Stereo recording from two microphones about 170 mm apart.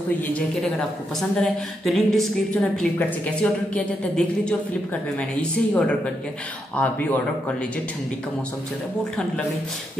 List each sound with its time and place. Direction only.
0.3 s a woman's voice: 5° left (ahead or behind)